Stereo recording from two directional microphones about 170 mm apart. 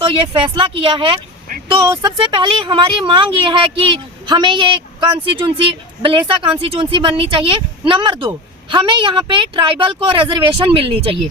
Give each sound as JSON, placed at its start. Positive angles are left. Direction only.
{"t": 0.0, "sound": "speech", "side_deg": -30}